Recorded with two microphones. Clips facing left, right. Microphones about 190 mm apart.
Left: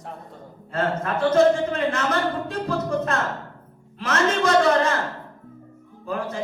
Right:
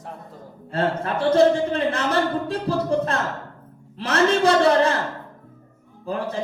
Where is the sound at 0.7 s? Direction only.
30° right (ahead or behind).